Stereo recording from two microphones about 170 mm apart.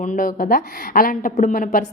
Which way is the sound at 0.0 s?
50° left (ahead or behind).